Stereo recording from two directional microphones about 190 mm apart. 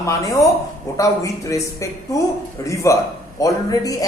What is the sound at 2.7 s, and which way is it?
Speech, 15° left (ahead or behind).